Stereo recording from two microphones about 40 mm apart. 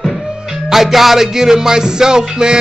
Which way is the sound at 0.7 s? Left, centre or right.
Centre.